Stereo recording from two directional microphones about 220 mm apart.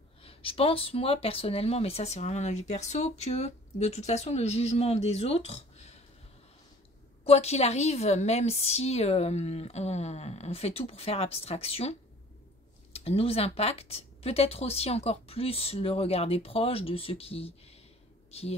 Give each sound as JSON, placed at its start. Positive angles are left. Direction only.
{"t": 0.2, "sound": "speech", "side_deg": 25}
{"t": 7.2, "sound": "speech", "side_deg": 30}
{"t": 12.9, "sound": "speech", "side_deg": 25}